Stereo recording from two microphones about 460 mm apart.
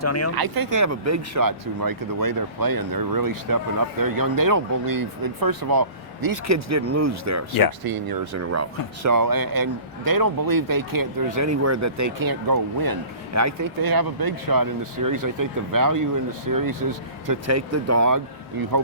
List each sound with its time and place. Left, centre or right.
0.0 s speech: left
0.3 s a man's voice: right
7.9 s speech: right
9.0 s a man's voice: right
17.2 s speech: right